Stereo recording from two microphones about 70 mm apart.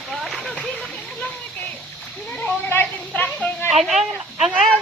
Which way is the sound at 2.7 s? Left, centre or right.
Left.